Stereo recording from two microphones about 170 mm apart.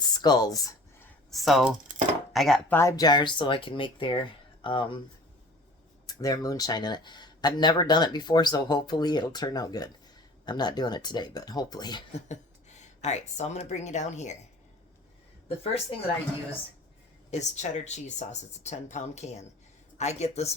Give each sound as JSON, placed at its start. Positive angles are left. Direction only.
{"t": 0.1, "sound": "a sound", "side_deg": 25}
{"t": 1.3, "sound": "speech", "side_deg": 0}
{"t": 2.7, "sound": "speech", "side_deg": 20}
{"t": 6.1, "sound": "speech", "side_deg": 20}
{"t": 12.1, "sound": "speech", "side_deg": 40}
{"t": 15.4, "sound": "speech", "side_deg": 35}
{"t": 17.3, "sound": "speech", "side_deg": 45}